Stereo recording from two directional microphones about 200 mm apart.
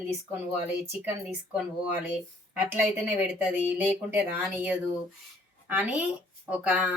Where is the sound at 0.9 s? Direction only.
10° right (ahead or behind).